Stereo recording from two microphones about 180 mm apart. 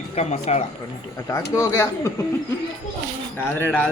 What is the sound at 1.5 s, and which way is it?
Speech, 15° left (ahead or behind).